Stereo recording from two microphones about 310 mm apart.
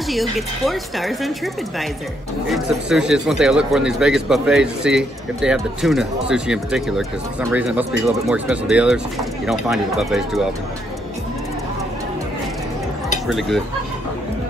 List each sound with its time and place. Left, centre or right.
0.1 s speech: centre
13.3 s speech: centre